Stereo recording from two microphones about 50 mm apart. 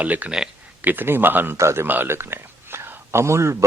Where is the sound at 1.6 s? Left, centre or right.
Right.